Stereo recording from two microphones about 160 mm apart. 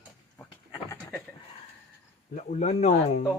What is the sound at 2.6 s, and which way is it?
Speech, 45° left (ahead or behind).